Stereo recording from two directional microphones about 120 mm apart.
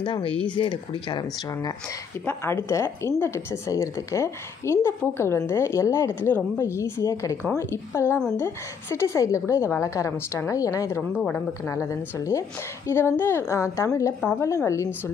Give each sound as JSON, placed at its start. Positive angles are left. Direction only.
{"t": 0.0, "sound": "speech", "side_deg": 45}
{"t": 2.2, "sound": "a woman's voice", "side_deg": 20}
{"t": 11.0, "sound": "a woman's voice", "side_deg": 10}
{"t": 11.7, "sound": "a woman's voice", "side_deg": 25}